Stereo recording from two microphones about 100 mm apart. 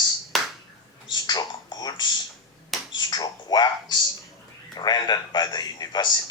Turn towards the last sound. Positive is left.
turn(degrees=45)  # may be behind; listen again after turning